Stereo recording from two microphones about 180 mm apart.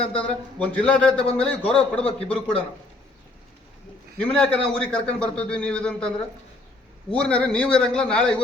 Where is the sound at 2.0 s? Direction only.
35° left (ahead or behind).